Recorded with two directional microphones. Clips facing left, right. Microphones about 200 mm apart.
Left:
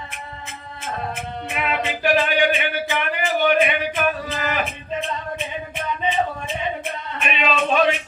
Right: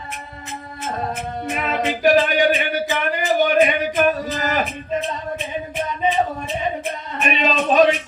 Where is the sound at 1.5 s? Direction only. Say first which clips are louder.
Right 2 dB; 40° right (ahead or behind).